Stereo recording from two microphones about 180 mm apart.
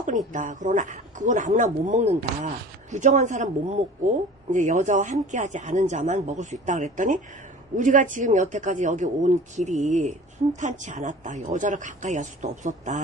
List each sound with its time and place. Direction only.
0.3 s speech: 45° right (ahead or behind)